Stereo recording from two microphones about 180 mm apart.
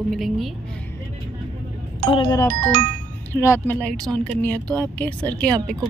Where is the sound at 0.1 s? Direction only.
Centre (ahead or behind).